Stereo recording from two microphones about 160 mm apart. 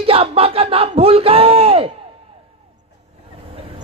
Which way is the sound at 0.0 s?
40° right (ahead or behind).